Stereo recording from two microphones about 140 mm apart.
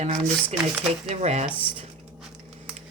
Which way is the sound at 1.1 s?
50° right (ahead or behind).